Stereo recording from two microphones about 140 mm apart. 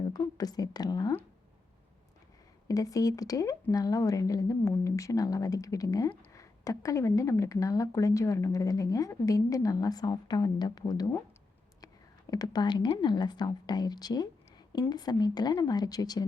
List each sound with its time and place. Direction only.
0.1 s speech: 30° left (ahead or behind)
2.6 s speech: 25° left (ahead or behind)
12.3 s a woman's voice: 30° left (ahead or behind)